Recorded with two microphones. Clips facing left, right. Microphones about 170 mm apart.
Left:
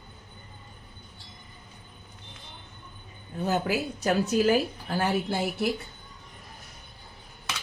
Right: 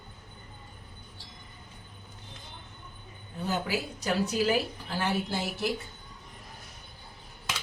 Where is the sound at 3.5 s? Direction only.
50° left (ahead or behind).